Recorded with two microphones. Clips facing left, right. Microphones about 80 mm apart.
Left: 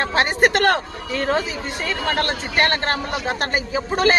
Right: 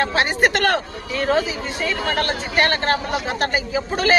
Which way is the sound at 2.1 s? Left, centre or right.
Left.